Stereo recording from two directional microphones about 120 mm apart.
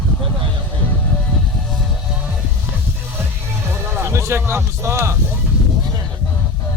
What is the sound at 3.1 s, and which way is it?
Music, 20° right (ahead or behind).